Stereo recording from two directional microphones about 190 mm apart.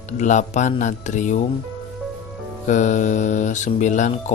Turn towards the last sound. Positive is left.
turn(degrees=40)  # may be behind; listen again after turning